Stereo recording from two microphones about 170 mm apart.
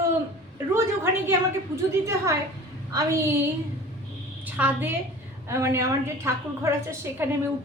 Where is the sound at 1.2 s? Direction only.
15° right (ahead or behind).